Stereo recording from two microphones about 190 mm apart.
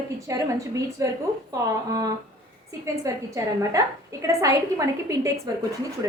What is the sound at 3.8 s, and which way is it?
A woman's voice, 15° right (ahead or behind).